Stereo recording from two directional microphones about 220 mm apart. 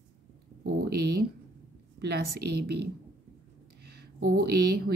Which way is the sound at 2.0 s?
45° right (ahead or behind).